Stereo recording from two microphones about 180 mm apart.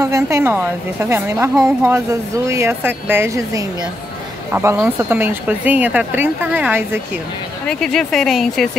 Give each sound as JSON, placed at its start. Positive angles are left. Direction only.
{"t": 0.0, "sound": "speech", "side_deg": -15}
{"t": 7.6, "sound": "speech", "side_deg": 5}